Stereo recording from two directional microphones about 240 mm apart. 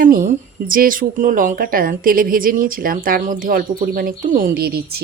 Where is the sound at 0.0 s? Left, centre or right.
Right.